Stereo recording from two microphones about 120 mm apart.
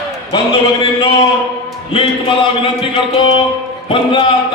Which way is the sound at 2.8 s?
45° left (ahead or behind).